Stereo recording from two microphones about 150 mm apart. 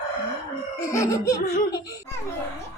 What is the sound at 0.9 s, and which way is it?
Laughter, 20° left (ahead or behind).